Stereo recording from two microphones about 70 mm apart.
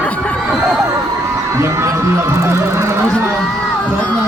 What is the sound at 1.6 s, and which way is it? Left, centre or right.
Speech, right.